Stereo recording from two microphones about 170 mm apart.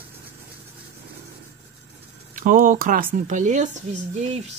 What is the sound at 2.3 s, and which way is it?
Speech, 50° right (ahead or behind).